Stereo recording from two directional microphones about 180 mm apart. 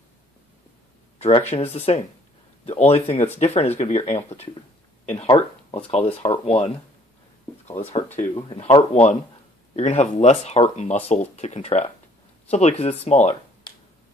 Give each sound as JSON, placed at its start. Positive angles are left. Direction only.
{"t": 1.1, "sound": "a sound", "side_deg": 35}
{"t": 1.5, "sound": "speech", "side_deg": 35}
{"t": 8.4, "sound": "speech", "side_deg": 30}